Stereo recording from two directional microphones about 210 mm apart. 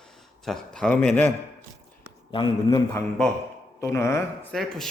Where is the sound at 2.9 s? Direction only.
5° left (ahead or behind).